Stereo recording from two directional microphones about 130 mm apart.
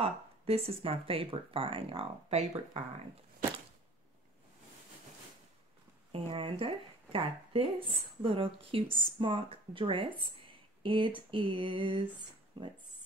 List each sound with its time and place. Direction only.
0.0 s speech: 50° right (ahead or behind)
6.1 s speech: 45° right (ahead or behind)